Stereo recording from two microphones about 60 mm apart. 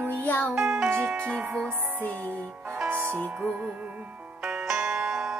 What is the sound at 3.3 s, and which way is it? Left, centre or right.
Music, right.